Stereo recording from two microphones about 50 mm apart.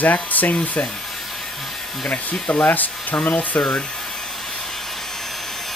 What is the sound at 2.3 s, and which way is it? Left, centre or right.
Speech, centre.